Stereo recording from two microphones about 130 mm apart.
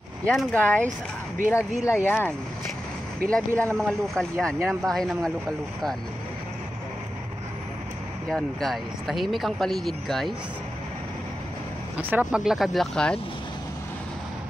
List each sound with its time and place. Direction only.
0.2 s speech: 5° left (ahead or behind); by 2.0 s 20° left (ahead or behind)
3.3 s speech: 10° left (ahead or behind)
8.3 s speech: 5° left (ahead or behind)
12.0 s speech: 15° right (ahead or behind); by 13.2 s 5° left (ahead or behind)